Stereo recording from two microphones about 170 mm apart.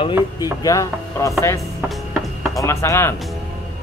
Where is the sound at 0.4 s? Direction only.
20° left (ahead or behind).